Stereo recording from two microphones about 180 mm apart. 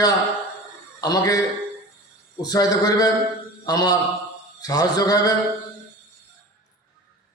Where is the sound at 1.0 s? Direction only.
20° left (ahead or behind).